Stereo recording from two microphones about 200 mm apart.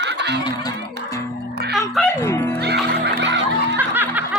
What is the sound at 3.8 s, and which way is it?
Snicker, 10° right (ahead or behind).